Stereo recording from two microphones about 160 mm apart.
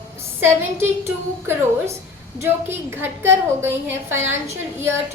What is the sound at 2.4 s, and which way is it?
A woman's voice, 15° right (ahead or behind).